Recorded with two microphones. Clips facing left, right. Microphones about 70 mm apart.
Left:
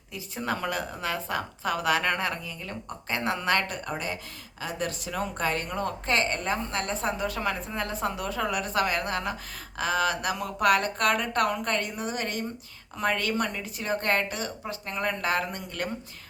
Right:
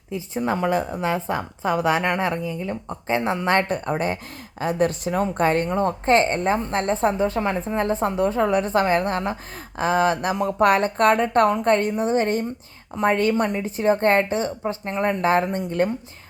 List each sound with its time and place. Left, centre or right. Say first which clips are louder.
0.1 s a woman's voice: right 7 dB; right